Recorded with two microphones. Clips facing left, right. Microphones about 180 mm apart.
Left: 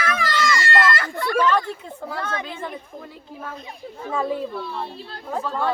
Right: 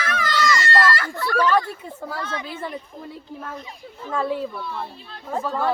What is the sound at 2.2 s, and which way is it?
Speech, 50° left (ahead or behind).